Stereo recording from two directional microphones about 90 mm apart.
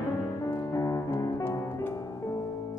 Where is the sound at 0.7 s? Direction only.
35° left (ahead or behind).